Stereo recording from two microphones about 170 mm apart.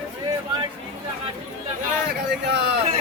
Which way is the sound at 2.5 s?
70° right (ahead or behind).